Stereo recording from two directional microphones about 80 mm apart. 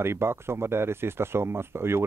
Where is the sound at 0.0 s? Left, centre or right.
Right.